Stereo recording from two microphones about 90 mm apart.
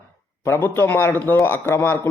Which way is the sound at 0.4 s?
25° left (ahead or behind).